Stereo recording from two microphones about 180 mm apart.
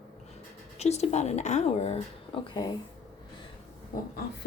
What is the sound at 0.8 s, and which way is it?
Speech, 35° left (ahead or behind).